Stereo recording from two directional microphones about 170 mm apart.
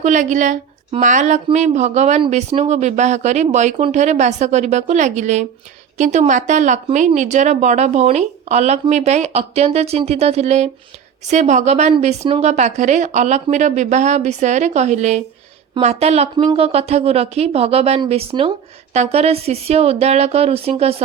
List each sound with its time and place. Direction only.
0.0 s a woman's voice: 45° right (ahead or behind)